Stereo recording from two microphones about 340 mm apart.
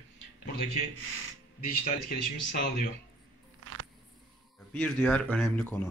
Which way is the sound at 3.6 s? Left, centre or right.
Right.